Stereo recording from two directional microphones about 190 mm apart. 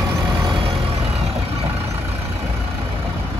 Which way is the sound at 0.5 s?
30° right (ahead or behind).